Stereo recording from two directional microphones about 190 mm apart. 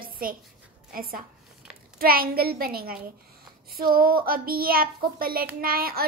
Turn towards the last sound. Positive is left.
turn(degrees=-50)  # may be behind; listen again after turning